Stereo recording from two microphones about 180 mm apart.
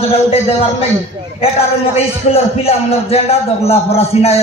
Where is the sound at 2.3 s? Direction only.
35° left (ahead or behind).